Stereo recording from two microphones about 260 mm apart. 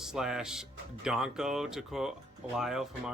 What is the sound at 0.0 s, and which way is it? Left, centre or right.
Speech, centre.